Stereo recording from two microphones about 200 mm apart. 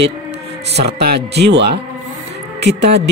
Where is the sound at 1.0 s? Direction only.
55° right (ahead or behind).